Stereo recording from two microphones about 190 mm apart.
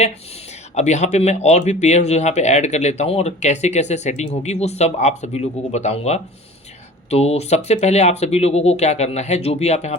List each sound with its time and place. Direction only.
0.8 s speech: 35° left (ahead or behind)